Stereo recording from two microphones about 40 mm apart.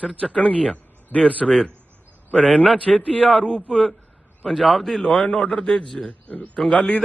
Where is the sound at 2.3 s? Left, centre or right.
Left.